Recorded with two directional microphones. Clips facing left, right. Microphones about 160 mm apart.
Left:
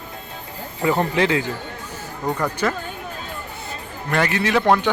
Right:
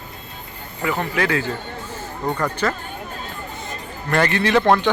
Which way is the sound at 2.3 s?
10° left (ahead or behind).